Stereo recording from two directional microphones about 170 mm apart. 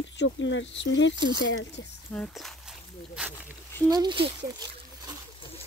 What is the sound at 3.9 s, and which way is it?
Speech, 25° right (ahead or behind).